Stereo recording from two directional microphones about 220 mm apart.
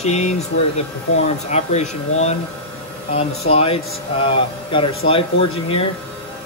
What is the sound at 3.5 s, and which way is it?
Speech, 25° left (ahead or behind).